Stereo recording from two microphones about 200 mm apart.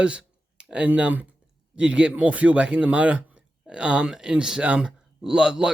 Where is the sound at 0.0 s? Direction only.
5° right (ahead or behind).